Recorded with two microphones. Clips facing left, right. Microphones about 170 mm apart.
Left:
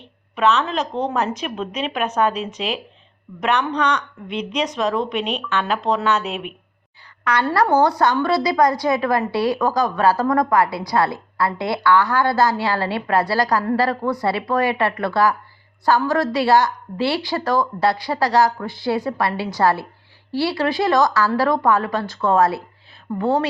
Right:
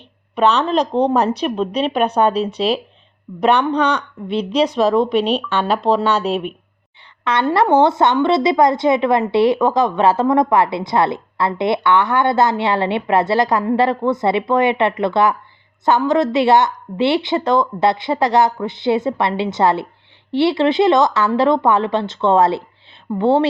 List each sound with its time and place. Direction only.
0.3 s a woman's voice: 35° right (ahead or behind)
7.3 s a woman's voice: 25° right (ahead or behind)